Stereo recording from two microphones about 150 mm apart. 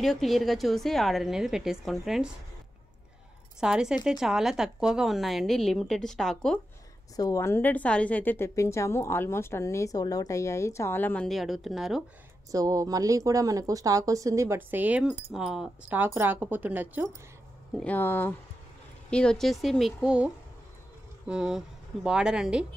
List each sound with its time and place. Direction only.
0.0 s a woman's voice: centre (ahead or behind)
3.5 s a woman's voice: 5° right (ahead or behind)
7.2 s a woman's voice: 20° left (ahead or behind)
11.2 s a woman's voice: centre (ahead or behind)
12.4 s a woman's voice: 25° right (ahead or behind); by 16.0 s 5° right (ahead or behind)
16.0 s speech: 15° right (ahead or behind)
17.7 s a woman's voice: 10° left (ahead or behind)
21.3 s a woman's voice: 5° right (ahead or behind)